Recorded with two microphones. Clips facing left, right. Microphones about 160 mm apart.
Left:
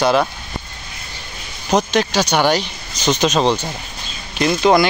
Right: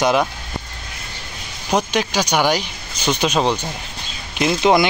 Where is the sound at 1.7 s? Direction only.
10° right (ahead or behind).